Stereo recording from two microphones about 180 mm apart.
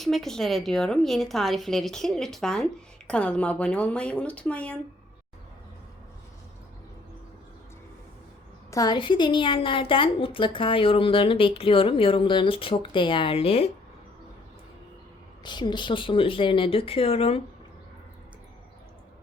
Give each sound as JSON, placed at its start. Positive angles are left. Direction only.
{"t": 0.0, "sound": "a woman's voice", "side_deg": 0}
{"t": 8.7, "sound": "a woman's voice", "side_deg": 20}
{"t": 15.4, "sound": "a woman's voice", "side_deg": 25}